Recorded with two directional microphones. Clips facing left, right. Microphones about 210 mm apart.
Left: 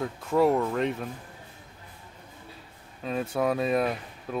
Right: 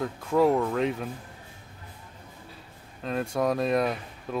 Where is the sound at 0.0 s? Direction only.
Centre (ahead or behind).